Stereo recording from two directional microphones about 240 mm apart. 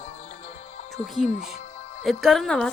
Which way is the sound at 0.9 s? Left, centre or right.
Centre.